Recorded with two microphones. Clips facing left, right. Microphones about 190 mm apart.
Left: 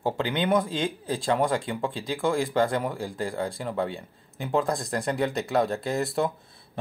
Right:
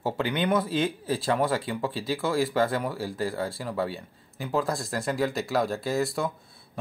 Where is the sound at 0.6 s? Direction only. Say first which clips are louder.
Even; 10° right (ahead or behind).